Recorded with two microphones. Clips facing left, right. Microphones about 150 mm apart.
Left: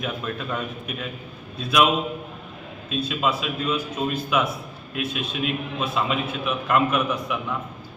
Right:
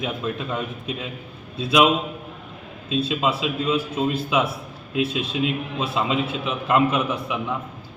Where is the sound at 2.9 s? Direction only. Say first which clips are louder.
Right 2 dB; 25° right (ahead or behind).